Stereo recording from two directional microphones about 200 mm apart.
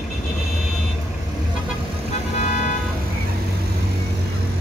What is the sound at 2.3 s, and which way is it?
Vehicle, 35° left (ahead or behind).